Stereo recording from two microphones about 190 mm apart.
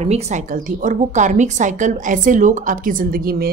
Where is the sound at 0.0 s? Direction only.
35° right (ahead or behind).